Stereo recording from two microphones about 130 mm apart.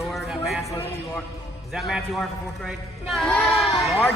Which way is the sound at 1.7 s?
Centre (ahead or behind).